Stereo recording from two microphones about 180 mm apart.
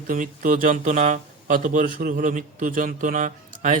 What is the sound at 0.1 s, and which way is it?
Speech, 50° right (ahead or behind).